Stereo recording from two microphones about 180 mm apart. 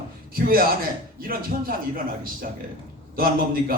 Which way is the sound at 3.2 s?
55° right (ahead or behind).